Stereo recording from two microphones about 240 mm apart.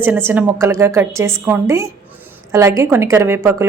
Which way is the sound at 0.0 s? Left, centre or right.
Centre.